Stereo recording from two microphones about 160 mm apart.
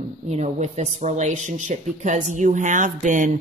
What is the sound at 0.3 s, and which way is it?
Speech, 45° right (ahead or behind).